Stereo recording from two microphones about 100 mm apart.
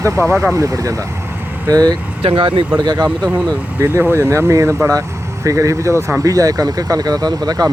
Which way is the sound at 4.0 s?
25° right (ahead or behind).